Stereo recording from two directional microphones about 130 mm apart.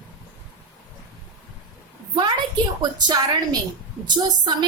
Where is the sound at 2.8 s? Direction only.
35° right (ahead or behind).